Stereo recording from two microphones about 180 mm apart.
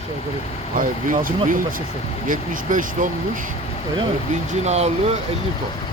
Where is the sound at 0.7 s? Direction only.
50° right (ahead or behind).